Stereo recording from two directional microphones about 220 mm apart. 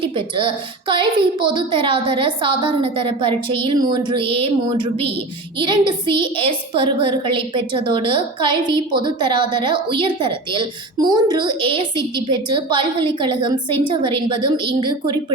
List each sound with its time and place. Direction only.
0.0 s a woman's voice: 25° right (ahead or behind)